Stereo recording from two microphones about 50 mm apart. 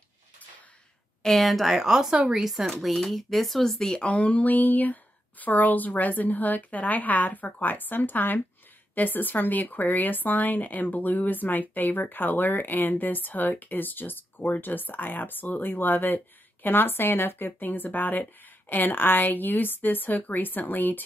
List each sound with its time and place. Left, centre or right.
1.2 s speech: centre
3.9 s speech: left